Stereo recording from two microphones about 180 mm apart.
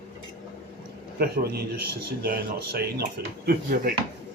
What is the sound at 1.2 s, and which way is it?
Speech, 60° right (ahead or behind).